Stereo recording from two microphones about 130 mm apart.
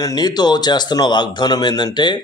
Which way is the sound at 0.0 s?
30° left (ahead or behind).